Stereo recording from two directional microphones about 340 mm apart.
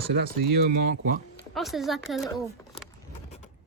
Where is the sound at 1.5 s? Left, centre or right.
Centre.